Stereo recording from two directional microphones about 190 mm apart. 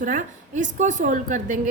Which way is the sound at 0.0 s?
40° right (ahead or behind).